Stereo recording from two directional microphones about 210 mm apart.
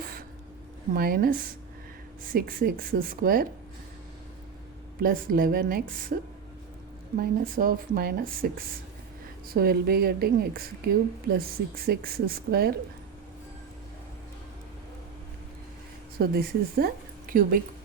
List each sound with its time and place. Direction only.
0.9 s a woman's voice: 45° right (ahead or behind)
4.9 s a woman's voice: 45° right (ahead or behind)
7.2 s a woman's voice: 45° right (ahead or behind)
16.1 s speech: 45° right (ahead or behind)